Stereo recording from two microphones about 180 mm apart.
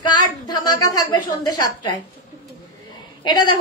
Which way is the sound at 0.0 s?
25° left (ahead or behind).